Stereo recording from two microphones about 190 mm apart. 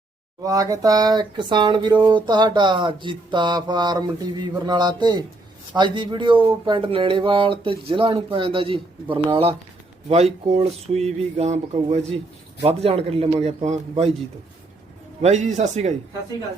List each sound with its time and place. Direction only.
0.4 s speech: 20° right (ahead or behind); by 14.1 s 35° right (ahead or behind)
15.2 s speech: 35° right (ahead or behind)